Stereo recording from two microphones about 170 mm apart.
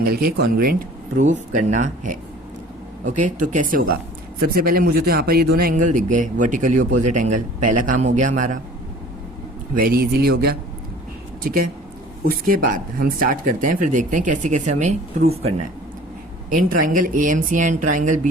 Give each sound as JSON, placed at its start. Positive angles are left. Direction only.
{"t": 0.0, "sound": "speech", "side_deg": -60}
{"t": 1.2, "sound": "speech", "side_deg": -45}
{"t": 9.7, "sound": "speech", "side_deg": -60}
{"t": 12.5, "sound": "speech", "side_deg": -55}
{"t": 16.5, "sound": "speech", "side_deg": -50}